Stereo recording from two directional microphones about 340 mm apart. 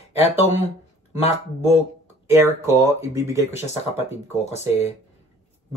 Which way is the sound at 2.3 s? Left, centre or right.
Centre.